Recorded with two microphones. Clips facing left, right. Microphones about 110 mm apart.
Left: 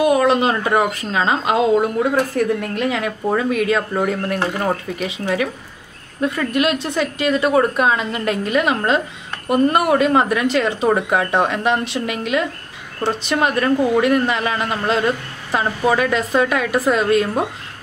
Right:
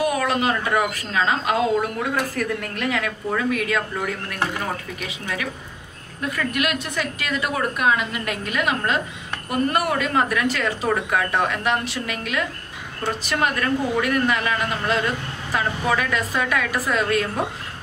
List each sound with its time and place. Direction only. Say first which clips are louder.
0.0 s a woman's voice: left 6 dB; 25° left (ahead or behind)
3.9 s a woman's voice: left 8 dB; 35° left (ahead or behind)